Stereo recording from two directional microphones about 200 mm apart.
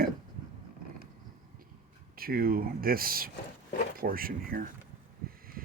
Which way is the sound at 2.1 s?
50° right (ahead or behind).